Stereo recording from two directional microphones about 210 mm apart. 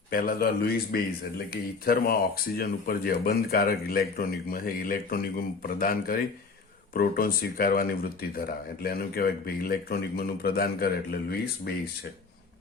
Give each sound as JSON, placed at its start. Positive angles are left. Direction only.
{"t": 0.1, "sound": "speech", "side_deg": 45}